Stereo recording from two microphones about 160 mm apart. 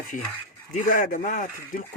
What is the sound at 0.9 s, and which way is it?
Speech, 55° left (ahead or behind).